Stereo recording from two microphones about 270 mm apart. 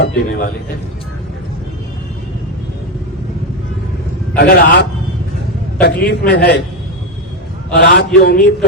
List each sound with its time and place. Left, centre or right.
0.0 s a man's voice: left
4.4 s a man's voice: left
7.7 s a man's voice: left